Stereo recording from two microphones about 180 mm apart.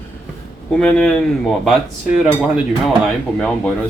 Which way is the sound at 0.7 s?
5° left (ahead or behind).